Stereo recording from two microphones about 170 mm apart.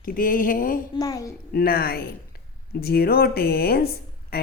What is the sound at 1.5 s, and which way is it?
A woman's voice, 65° left (ahead or behind).